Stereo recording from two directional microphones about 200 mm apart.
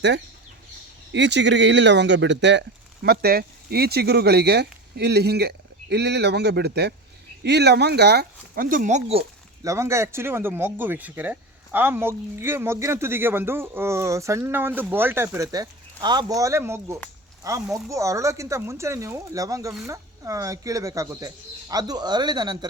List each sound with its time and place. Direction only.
1.1 s speech: 60° right (ahead or behind); by 9.2 s 35° right (ahead or behind)
9.6 s speech: 15° right (ahead or behind)